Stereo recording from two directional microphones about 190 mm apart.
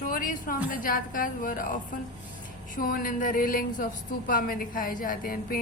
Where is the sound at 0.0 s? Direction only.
45° left (ahead or behind).